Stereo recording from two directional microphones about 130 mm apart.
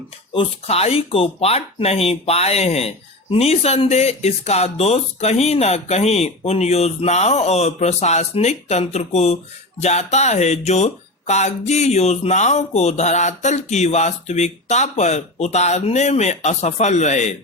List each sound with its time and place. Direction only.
0.3 s speech: 50° left (ahead or behind)